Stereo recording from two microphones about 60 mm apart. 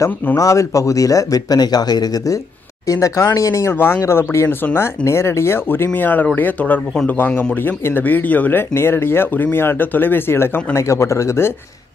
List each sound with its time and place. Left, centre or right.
0.4 s speech: left
2.9 s speech: left
3.7 s speech: left
5.9 s a man's voice: left